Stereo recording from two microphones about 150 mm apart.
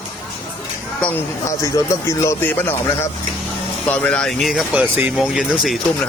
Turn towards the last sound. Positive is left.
turn(degrees=5)  # may be behind; listen again after turning